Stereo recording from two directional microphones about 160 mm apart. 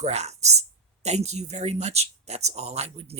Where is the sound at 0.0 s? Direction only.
45° right (ahead or behind).